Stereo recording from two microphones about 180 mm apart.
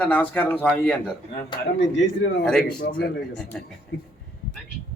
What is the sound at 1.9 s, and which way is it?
Speech, 85° left.